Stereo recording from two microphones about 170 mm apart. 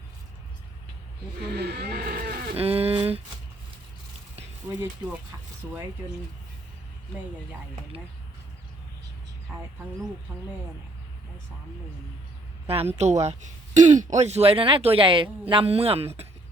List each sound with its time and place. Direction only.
1.5 s livestock: 75° right (ahead or behind)
2.6 s a sound: 35° right (ahead or behind)
12.6 s speech: 35° right (ahead or behind)